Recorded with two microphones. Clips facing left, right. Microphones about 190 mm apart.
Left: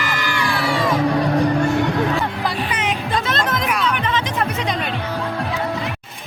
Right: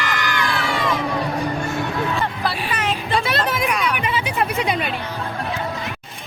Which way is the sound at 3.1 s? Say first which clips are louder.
Right 2 dB; 10° right (ahead or behind).